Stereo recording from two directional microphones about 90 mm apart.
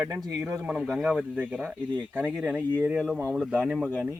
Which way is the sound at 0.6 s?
15° right (ahead or behind).